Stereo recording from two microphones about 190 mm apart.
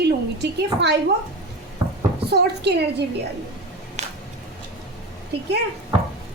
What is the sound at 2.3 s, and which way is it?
Speech, 60° right (ahead or behind).